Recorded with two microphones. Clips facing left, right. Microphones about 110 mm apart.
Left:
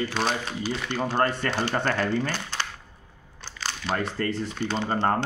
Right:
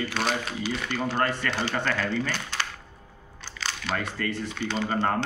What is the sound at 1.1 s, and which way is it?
Speech, 35° left (ahead or behind).